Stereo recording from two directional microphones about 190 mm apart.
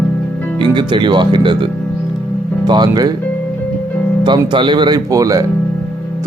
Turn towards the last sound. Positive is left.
turn(degrees=-20)  # may be behind; listen again after turning